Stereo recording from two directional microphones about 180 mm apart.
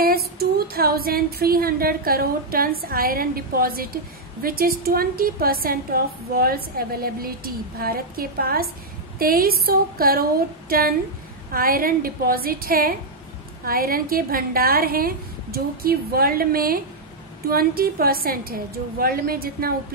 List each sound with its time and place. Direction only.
0.0 s female singing: 60° right (ahead or behind)
10.7 s a woman's voice: 55° right (ahead or behind)
13.7 s female singing: 55° right (ahead or behind)